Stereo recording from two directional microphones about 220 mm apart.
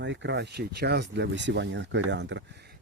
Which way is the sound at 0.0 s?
55° right (ahead or behind).